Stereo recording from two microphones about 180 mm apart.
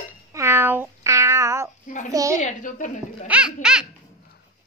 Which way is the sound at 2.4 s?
45° left (ahead or behind).